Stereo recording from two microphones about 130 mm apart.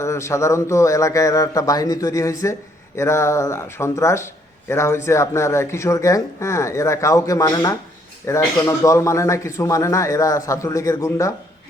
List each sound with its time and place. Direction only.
0.0 s speech: 20° left (ahead or behind)